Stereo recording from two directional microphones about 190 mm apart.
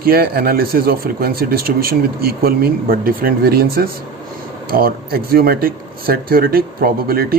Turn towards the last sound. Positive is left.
turn(degrees=-50)  # may be behind; listen again after turning